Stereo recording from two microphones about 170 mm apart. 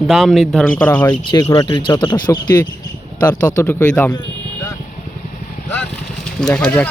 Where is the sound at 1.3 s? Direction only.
20° left (ahead or behind).